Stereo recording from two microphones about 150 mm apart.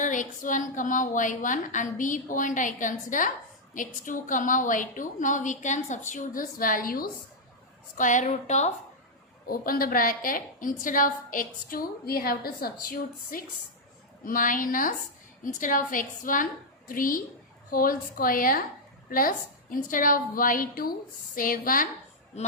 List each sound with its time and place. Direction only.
0.0 s a woman's voice: 60° left (ahead or behind)
7.9 s a woman's voice: 60° left (ahead or behind)
9.5 s a woman's voice: 75° left (ahead or behind)
14.3 s a woman's voice: 65° left (ahead or behind)
22.3 s a woman's voice: 45° left (ahead or behind)